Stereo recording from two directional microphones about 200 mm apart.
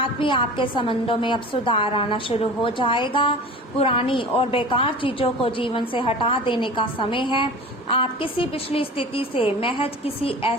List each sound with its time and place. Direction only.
0.0 s a woman's voice: 25° left (ahead or behind)